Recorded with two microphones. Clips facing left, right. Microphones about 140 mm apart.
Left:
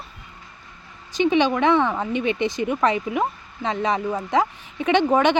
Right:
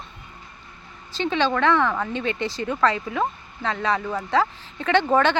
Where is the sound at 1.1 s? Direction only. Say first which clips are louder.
Left 4 dB; 15° left (ahead or behind).